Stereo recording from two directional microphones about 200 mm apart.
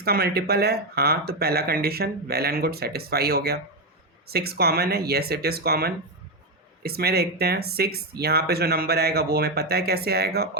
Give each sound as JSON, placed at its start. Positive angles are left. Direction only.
{"t": 0.0, "sound": "speech", "side_deg": -50}